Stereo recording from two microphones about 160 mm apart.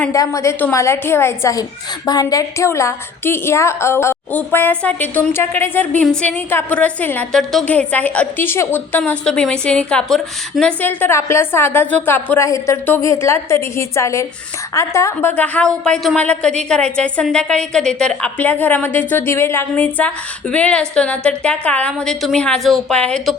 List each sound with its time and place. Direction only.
0.1 s a woman's voice: 20° left (ahead or behind)